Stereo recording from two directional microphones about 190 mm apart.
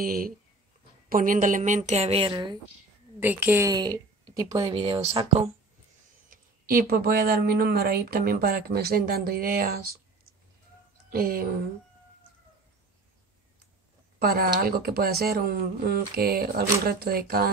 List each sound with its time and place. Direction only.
0.0 s a woman's voice: 50° right (ahead or behind); by 2.6 s 20° right (ahead or behind)
3.2 s a woman's voice: 10° right (ahead or behind); by 5.5 s 30° right (ahead or behind)
6.3 s speech: 50° right (ahead or behind)
11.1 s a woman's voice: 50° right (ahead or behind)
14.2 s speech: 50° right (ahead or behind)